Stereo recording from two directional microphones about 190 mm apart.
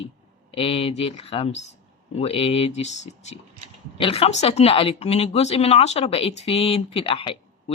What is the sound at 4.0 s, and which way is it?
Speech, 30° left (ahead or behind).